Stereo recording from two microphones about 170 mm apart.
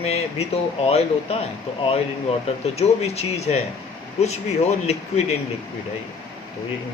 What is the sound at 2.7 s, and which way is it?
Speech, 35° left (ahead or behind).